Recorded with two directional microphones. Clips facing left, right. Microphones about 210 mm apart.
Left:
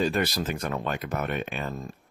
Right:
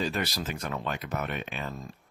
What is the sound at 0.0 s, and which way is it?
Speech, 50° left (ahead or behind).